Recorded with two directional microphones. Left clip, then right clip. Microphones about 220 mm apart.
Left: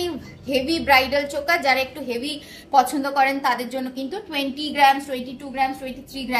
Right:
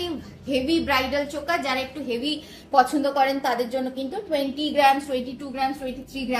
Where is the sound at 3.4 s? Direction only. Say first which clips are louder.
Left 1 dB; 40° left (ahead or behind).